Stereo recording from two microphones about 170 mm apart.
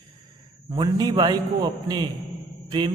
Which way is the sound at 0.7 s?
25° right (ahead or behind).